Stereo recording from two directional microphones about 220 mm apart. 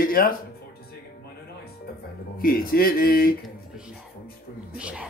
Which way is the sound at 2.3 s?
40° left (ahead or behind).